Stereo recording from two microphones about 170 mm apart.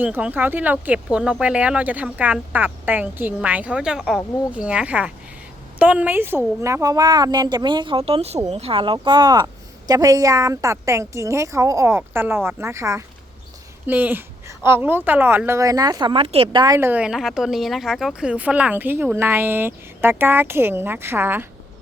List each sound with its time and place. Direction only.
0.0 s a woman's voice: 10° right (ahead or behind)